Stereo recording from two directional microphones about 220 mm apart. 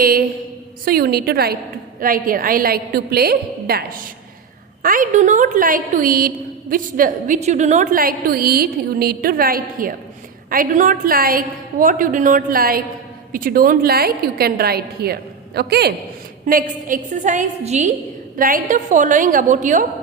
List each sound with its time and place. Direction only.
0.0 s a woman's voice: 40° right (ahead or behind)